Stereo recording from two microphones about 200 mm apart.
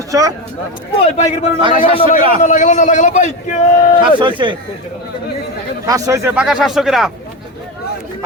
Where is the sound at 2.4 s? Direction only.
40° left (ahead or behind).